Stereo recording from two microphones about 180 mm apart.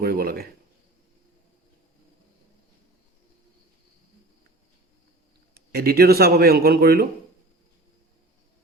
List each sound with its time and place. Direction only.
0.0 s speech: 60° right (ahead or behind)
5.7 s a man's voice: 60° right (ahead or behind)